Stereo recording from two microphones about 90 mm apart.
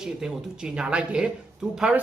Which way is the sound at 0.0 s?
5° right (ahead or behind).